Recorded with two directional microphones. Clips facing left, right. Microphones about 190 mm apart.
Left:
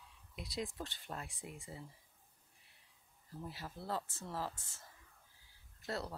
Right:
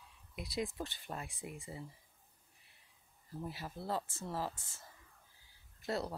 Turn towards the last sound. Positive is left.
turn(degrees=-15)  # may be behind; listen again after turning